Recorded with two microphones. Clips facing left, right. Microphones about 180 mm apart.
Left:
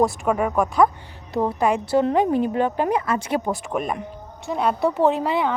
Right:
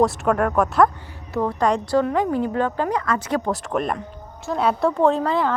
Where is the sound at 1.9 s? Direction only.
20° left (ahead or behind).